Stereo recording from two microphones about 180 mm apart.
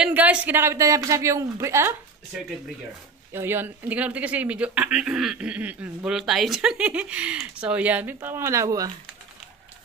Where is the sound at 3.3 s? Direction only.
15° right (ahead or behind).